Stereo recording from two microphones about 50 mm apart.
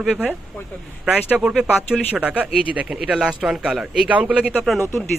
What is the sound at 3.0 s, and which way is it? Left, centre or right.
Speech, centre.